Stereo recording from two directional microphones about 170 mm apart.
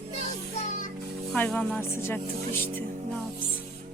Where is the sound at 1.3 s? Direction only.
5° left (ahead or behind).